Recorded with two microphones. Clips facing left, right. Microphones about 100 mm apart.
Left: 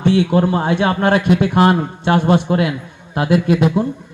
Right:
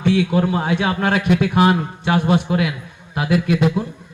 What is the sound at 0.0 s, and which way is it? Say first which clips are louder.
A man's voice: left 3 dB; 30° left (ahead or behind).